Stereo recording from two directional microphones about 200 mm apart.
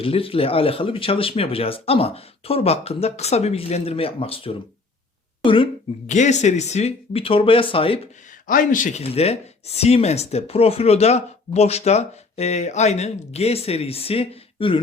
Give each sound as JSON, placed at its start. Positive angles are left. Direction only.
{"t": 0.0, "sound": "speech", "side_deg": 25}
{"t": 6.1, "sound": "speech", "side_deg": 35}
{"t": 8.4, "sound": "speech", "side_deg": 40}